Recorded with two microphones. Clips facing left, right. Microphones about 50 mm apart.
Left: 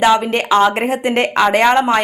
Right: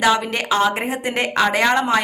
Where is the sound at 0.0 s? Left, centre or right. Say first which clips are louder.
Left 5 dB; left.